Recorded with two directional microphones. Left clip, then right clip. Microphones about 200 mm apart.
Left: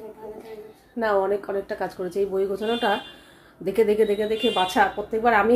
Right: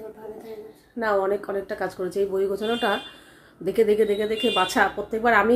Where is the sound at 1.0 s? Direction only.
10° left (ahead or behind).